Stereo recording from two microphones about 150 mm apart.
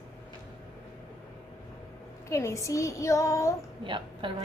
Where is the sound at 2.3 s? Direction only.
20° left (ahead or behind).